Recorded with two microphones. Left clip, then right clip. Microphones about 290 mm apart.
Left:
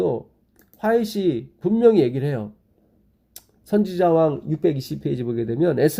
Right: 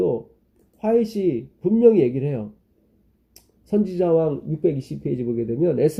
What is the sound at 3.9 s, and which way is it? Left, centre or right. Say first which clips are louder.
Speech: left 2 dB; left.